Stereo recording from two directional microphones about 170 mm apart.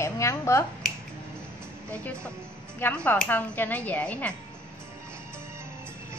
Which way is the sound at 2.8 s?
10° left (ahead or behind).